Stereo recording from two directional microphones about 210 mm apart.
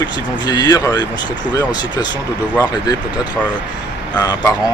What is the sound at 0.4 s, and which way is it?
Speech, 20° left (ahead or behind).